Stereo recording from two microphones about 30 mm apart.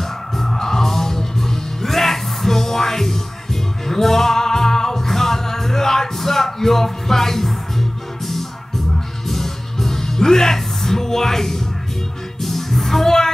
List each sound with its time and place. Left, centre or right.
0.0 s music: centre
9.3 s music: centre
13.0 s music: centre